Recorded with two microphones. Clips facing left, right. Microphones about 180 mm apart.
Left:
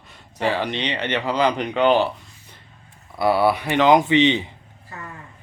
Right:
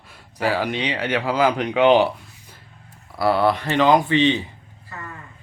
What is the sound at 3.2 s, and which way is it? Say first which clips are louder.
Speech: even; 10° left (ahead or behind).